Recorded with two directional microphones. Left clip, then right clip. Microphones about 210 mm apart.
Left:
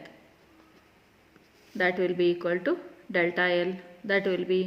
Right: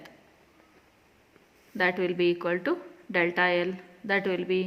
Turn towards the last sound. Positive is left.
turn(degrees=-20)  # may be behind; listen again after turning